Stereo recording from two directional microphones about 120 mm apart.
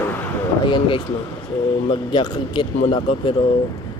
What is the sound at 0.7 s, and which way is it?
Speech, 45° left (ahead or behind).